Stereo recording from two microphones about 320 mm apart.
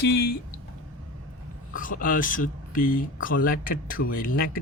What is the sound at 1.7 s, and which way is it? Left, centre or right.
Speech, left.